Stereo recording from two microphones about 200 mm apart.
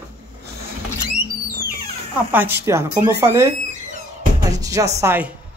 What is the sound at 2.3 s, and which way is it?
Speech, 10° right (ahead or behind).